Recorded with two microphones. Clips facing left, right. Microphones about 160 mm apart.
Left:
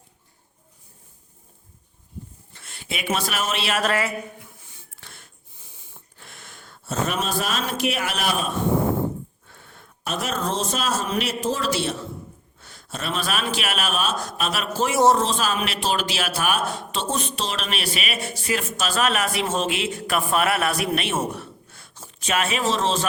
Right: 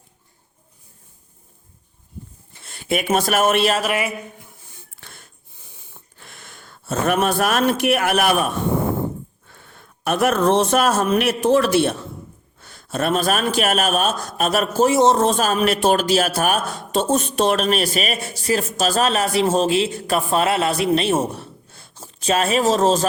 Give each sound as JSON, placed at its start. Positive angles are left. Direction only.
{"t": 2.6, "sound": "speech", "side_deg": -50}
{"t": 3.8, "sound": "a woman's voice", "side_deg": -15}
{"t": 4.9, "sound": "a sound", "side_deg": -50}
{"t": 6.1, "sound": "speech", "side_deg": -60}
{"t": 10.0, "sound": "a man's voice", "side_deg": -60}
{"t": 14.8, "sound": "a man's voice", "side_deg": -25}
{"t": 15.2, "sound": "a man's voice", "side_deg": -50}